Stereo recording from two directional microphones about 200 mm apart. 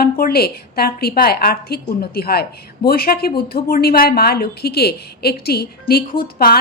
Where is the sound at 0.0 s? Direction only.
50° left (ahead or behind).